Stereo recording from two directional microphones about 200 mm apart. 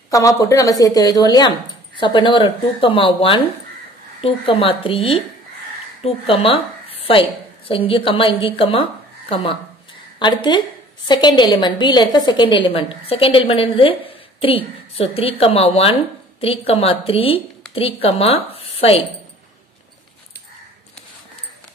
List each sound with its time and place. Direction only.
0.1 s a woman's voice: 15° left (ahead or behind)